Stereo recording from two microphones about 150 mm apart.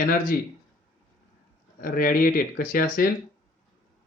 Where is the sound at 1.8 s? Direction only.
70° left (ahead or behind).